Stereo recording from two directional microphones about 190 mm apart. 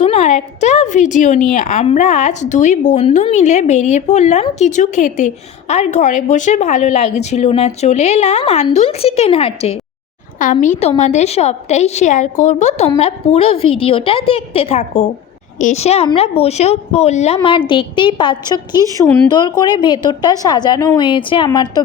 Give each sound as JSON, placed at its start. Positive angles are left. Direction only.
{"t": 0.0, "sound": "a woman's voice", "side_deg": 35}
{"t": 10.3, "sound": "a woman's voice", "side_deg": 45}